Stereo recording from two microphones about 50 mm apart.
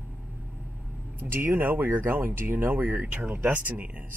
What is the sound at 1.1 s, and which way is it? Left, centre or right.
Speech, right.